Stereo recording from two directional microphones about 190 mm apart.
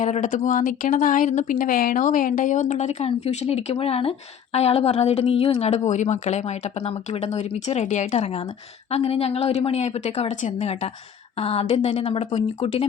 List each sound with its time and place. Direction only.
0.0 s a woman's voice: 40° left (ahead or behind)